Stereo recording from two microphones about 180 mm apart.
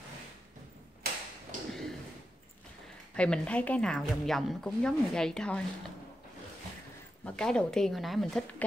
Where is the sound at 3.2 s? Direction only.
5° left (ahead or behind).